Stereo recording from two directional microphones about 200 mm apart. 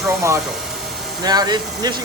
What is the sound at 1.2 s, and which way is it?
Speech, 20° right (ahead or behind).